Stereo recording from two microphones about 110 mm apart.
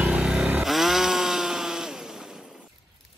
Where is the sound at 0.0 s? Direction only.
10° right (ahead or behind).